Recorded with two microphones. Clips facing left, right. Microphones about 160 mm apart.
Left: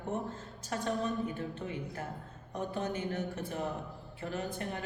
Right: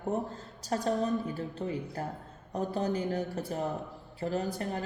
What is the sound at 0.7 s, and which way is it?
A man's voice, 35° right (ahead or behind).